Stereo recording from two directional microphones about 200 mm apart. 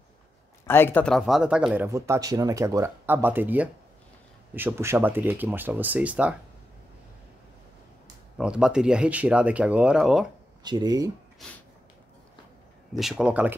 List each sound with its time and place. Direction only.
0.7 s speech: 10° left (ahead or behind); by 6.3 s 5° right (ahead or behind)
8.4 s speech: 5° right (ahead or behind)
10.6 s speech: 20° right (ahead or behind)
12.9 s speech: 5° right (ahead or behind)